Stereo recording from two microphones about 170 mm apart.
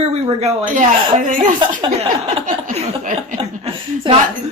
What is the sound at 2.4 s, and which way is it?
A woman's voice, 50° right (ahead or behind).